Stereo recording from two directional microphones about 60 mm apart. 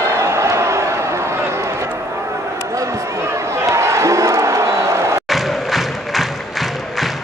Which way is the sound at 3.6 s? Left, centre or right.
Right.